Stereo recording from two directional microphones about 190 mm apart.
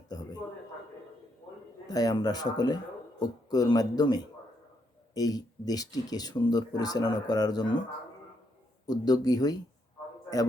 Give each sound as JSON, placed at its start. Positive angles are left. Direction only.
{"t": 0.1, "sound": "a sound", "side_deg": 20}
{"t": 1.9, "sound": "speech", "side_deg": 20}
{"t": 8.9, "sound": "speech", "side_deg": 20}